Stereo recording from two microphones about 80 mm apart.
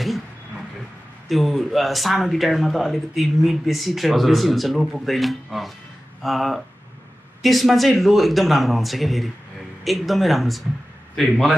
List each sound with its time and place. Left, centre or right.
1.3 s speech: centre